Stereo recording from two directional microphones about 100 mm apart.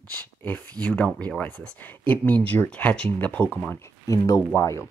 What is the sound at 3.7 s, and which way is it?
Speech, 30° left (ahead or behind).